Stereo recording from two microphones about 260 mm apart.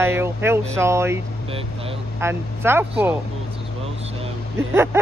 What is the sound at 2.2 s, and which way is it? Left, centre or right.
Speech, centre.